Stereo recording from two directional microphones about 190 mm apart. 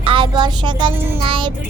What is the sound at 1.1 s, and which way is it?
Speech, 25° right (ahead or behind).